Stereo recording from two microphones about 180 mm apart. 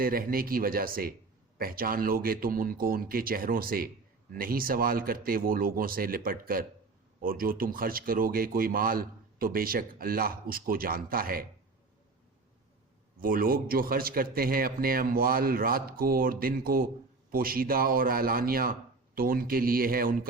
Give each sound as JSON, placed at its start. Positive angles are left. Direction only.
{"t": 0.0, "sound": "speech", "side_deg": -55}
{"t": 13.1, "sound": "a man's voice", "side_deg": -50}